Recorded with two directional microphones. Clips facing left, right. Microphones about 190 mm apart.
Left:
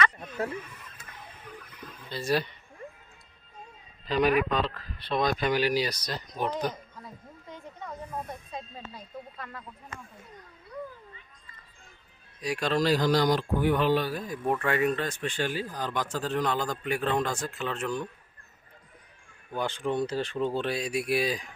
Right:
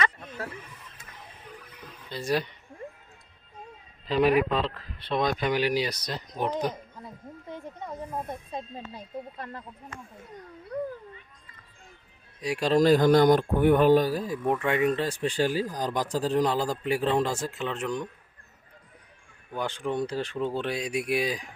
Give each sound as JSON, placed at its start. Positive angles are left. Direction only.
{"t": 2.0, "sound": "speech", "side_deg": -20}
{"t": 4.0, "sound": "speech", "side_deg": -30}
{"t": 7.8, "sound": "speech", "side_deg": -25}
{"t": 10.7, "sound": "cat", "side_deg": -65}
{"t": 12.4, "sound": "speech", "side_deg": -25}
{"t": 12.7, "sound": "speech", "side_deg": -50}
{"t": 14.4, "sound": "speech", "side_deg": -20}
{"t": 19.5, "sound": "speech", "side_deg": -10}